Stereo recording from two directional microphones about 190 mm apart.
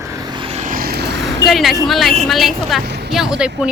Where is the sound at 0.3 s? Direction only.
30° right (ahead or behind); by 1.1 s 55° right (ahead or behind).